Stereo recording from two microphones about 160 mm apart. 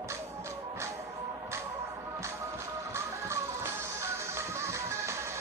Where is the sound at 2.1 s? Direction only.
15° right (ahead or behind).